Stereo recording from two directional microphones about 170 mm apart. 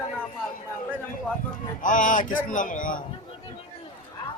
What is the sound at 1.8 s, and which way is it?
A man's voice, 50° left (ahead or behind).